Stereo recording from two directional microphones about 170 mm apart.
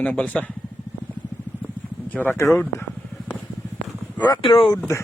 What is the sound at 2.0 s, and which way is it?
Speech, 10° left (ahead or behind).